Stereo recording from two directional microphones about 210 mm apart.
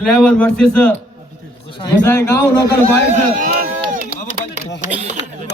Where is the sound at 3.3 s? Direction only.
40° right (ahead or behind).